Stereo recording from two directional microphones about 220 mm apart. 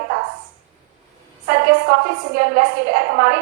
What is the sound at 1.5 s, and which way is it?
A woman's voice, 45° right (ahead or behind).